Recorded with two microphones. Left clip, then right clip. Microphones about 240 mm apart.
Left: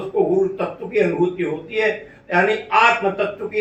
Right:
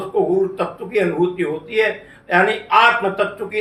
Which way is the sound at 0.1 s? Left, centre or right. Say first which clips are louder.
Even; right.